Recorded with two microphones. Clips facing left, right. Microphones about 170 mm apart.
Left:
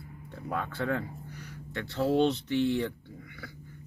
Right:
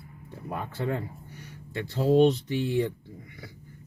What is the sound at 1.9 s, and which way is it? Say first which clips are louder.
Speech: right 5 dB; 10° right (ahead or behind).